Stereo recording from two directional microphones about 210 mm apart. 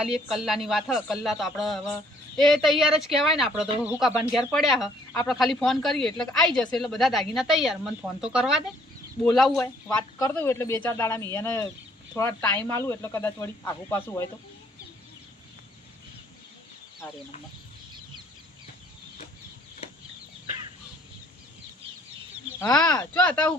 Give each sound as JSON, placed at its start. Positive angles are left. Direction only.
{"t": 0.0, "sound": "speech", "side_deg": -5}
{"t": 22.9, "sound": "speech", "side_deg": 10}